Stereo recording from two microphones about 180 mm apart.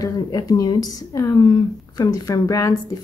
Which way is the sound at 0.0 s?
20° left (ahead or behind).